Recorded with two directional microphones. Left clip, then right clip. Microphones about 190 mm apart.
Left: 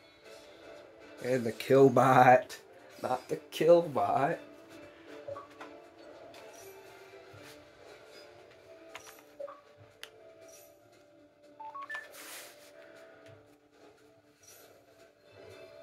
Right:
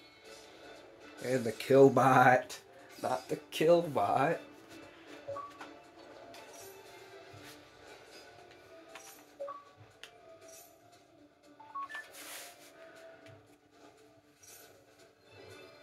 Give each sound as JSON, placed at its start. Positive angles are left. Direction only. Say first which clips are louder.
{"t": 1.2, "sound": "speech", "louder": "left 2 dB", "side_deg": 20}
{"t": 3.0, "sound": "speech", "louder": "left 1 dB", "side_deg": 20}